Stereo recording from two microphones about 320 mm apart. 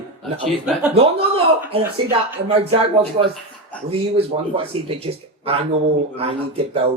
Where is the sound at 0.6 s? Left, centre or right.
Centre.